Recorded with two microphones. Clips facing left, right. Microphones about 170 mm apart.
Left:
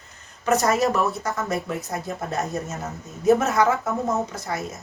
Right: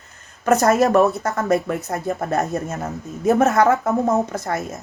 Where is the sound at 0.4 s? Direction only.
60° right (ahead or behind).